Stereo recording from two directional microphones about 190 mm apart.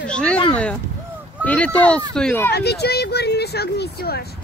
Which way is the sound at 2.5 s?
60° left (ahead or behind).